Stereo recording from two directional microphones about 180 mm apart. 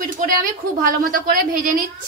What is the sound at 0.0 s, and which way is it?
A woman's voice, 50° right (ahead or behind).